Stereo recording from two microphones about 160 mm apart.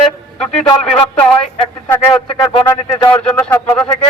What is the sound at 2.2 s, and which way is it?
Speech, 35° left (ahead or behind).